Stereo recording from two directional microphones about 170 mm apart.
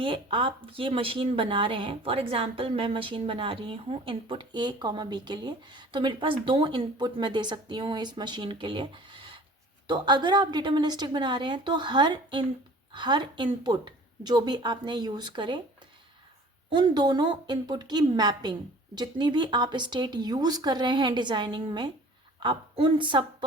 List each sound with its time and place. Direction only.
0.0 s speech: 30° right (ahead or behind)
16.6 s speech: 25° right (ahead or behind)